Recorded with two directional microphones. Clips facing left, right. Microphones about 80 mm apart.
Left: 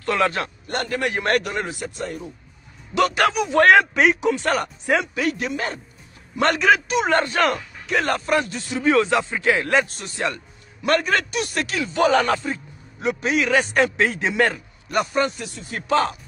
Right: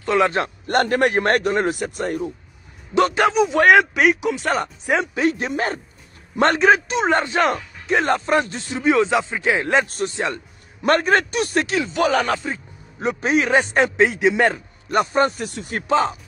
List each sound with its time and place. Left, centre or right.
0.0 s a man's voice: right
0.7 s a man's voice: right
2.9 s speech: right
3.9 s speech: centre
4.5 s speech: centre
5.5 s a man's voice: right
10.8 s a man's voice: right
11.9 s speech: centre
13.0 s speech: right
14.9 s a man's voice: right
15.5 s a man's voice: right
15.9 s speech: centre